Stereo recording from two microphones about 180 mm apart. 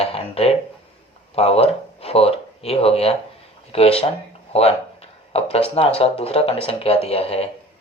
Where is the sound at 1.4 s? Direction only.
35° left (ahead or behind).